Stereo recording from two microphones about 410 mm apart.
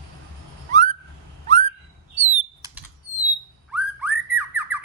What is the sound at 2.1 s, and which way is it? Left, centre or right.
Bird flight, centre.